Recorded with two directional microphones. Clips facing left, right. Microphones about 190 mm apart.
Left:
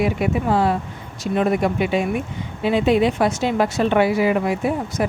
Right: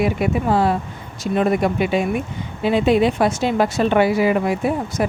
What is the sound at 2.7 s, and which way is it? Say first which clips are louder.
Speech: right 1 dB; 35° right (ahead or behind).